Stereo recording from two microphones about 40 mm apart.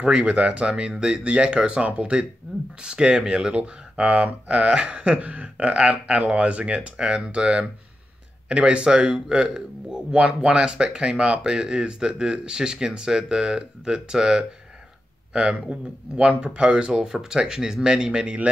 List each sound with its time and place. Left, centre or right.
0.0 s speech: right
16.2 s speech: right
18.2 s speech: right